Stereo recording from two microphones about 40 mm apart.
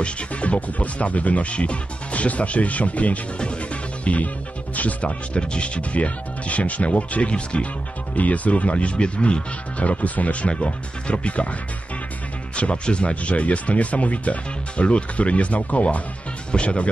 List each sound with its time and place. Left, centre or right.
0.0 s speech: left
4.0 s music: left
4.7 s speech: left
12.5 s speech: left